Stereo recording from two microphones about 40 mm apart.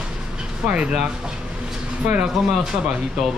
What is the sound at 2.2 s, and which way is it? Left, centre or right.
Speech, centre.